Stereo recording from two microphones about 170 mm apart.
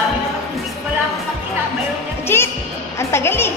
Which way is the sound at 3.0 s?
15° left (ahead or behind).